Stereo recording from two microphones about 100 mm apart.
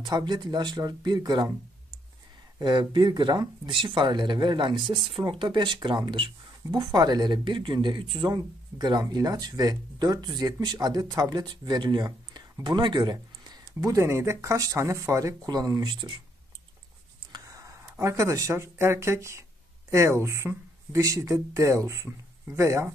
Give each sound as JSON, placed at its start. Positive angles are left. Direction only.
{"t": 0.0, "sound": "speech", "side_deg": -45}
{"t": 2.6, "sound": "speech", "side_deg": -50}
{"t": 6.7, "sound": "speech", "side_deg": -45}
{"t": 17.3, "sound": "speech", "side_deg": -35}